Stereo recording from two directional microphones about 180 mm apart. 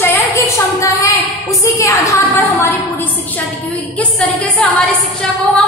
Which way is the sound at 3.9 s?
10° left (ahead or behind).